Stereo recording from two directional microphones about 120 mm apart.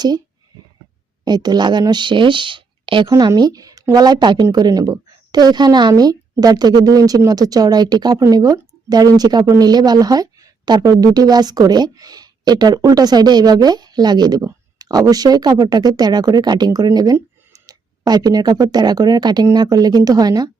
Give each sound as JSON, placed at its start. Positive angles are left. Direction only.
{"t": 1.2, "sound": "a woman's voice", "side_deg": -35}